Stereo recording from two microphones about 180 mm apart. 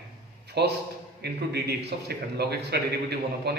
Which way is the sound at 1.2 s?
65° right (ahead or behind).